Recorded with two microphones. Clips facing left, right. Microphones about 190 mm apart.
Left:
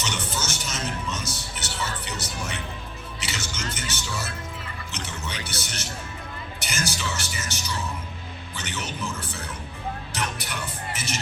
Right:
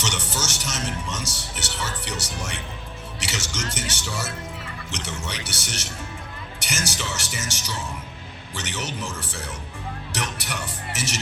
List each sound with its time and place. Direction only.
0.0 s music: 90° right
4.9 s a man's voice: 85° right